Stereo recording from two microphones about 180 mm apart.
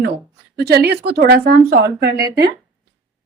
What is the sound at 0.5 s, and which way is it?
Speech, 65° right (ahead or behind).